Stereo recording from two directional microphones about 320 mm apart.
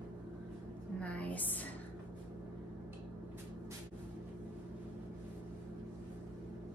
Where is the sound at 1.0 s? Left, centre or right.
Centre.